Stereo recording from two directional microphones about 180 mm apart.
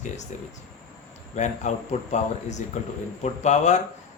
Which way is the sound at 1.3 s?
40° left (ahead or behind).